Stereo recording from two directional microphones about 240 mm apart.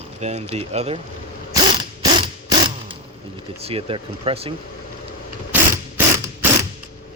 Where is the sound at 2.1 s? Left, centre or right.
Centre.